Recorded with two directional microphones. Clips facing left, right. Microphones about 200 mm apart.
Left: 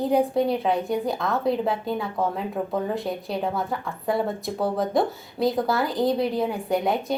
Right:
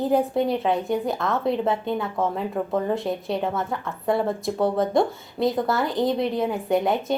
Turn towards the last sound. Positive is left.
turn(degrees=0)  # may be behind; listen again after turning